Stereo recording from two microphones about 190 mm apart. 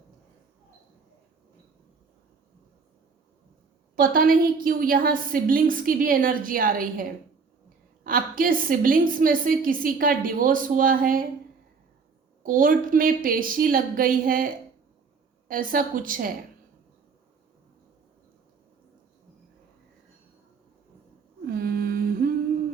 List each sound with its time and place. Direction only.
3.9 s a woman's voice: 45° right (ahead or behind)
12.4 s a woman's voice: 45° right (ahead or behind)
21.4 s humming: 50° right (ahead or behind)